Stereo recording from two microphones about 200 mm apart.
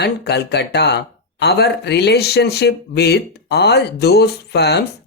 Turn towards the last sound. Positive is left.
turn(degrees=55)  # may be behind; listen again after turning